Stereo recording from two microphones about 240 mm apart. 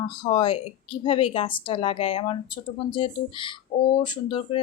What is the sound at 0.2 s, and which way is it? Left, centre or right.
A woman's voice, centre.